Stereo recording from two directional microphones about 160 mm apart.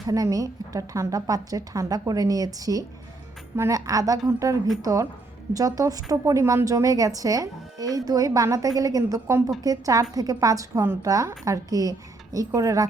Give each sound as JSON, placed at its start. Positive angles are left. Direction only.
{"t": 0.1, "sound": "a woman's voice", "side_deg": -20}